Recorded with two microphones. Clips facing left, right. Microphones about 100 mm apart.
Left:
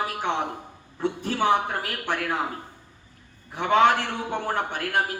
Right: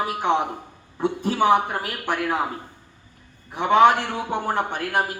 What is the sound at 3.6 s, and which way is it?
A man's voice, 15° right (ahead or behind).